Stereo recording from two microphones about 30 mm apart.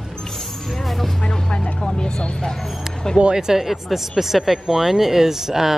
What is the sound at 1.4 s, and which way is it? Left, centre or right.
Vehicle, left.